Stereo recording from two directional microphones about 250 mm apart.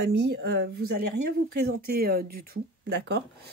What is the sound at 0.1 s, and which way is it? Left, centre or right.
Speech, right.